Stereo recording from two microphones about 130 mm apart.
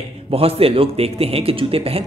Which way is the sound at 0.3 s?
50° right (ahead or behind).